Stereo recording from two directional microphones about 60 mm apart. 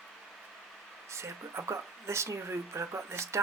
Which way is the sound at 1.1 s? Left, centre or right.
Right.